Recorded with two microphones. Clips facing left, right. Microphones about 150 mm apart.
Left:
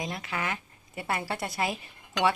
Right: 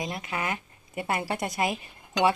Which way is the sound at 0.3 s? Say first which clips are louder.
Right 2 dB; 15° right (ahead or behind).